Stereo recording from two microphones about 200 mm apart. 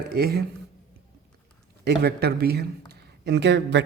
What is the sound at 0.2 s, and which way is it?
Speech, 50° right (ahead or behind).